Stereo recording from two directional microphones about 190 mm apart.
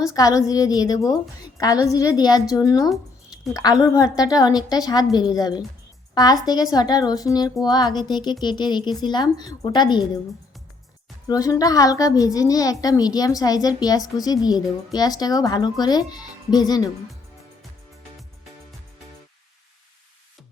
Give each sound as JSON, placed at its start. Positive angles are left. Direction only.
{"t": 0.0, "sound": "a woman's voice", "side_deg": 20}
{"t": 11.3, "sound": "a woman's voice", "side_deg": 20}